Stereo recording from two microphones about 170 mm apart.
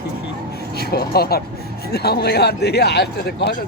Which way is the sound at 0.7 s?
65° left (ahead or behind).